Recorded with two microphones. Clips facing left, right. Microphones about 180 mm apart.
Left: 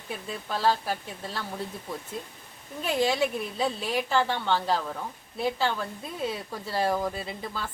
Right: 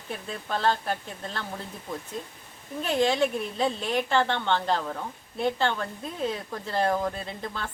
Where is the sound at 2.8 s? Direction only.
5° left (ahead or behind).